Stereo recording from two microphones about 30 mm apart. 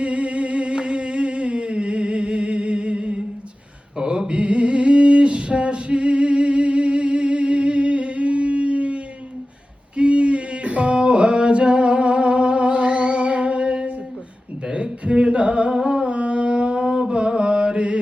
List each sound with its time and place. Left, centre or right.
0.0 s music: right
10.0 s a sound: right
15.0 s music: right